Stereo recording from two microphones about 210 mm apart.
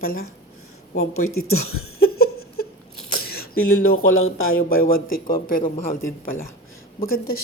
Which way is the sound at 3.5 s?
90° left.